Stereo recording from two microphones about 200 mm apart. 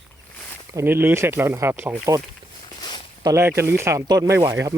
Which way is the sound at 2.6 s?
25° left (ahead or behind).